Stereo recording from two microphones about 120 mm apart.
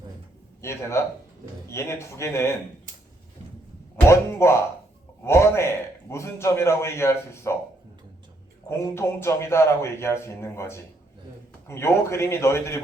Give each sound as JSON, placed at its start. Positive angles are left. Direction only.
{"t": 0.6, "sound": "a man's voice", "side_deg": 25}
{"t": 4.1, "sound": "a man's voice", "side_deg": 20}
{"t": 8.7, "sound": "a man's voice", "side_deg": 20}